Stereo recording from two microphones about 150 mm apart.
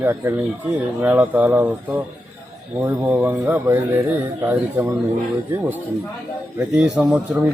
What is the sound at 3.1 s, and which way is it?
Speech, 10° right (ahead or behind).